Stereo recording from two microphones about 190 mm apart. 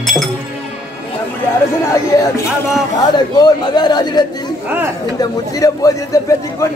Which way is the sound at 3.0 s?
20° left (ahead or behind).